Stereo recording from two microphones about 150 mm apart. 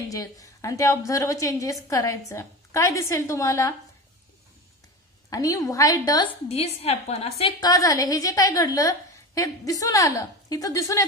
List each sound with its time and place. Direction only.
0.1 s a woman's voice: 20° left (ahead or behind)
5.3 s a woman's voice: 20° left (ahead or behind)
6.5 s a woman's voice: 45° left (ahead or behind)
7.6 s a woman's voice: 25° left (ahead or behind)